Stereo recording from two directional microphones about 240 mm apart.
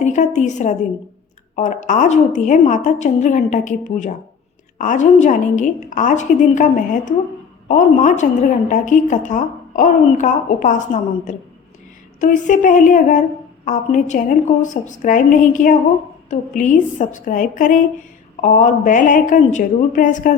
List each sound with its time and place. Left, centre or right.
0.0 s a woman's voice: left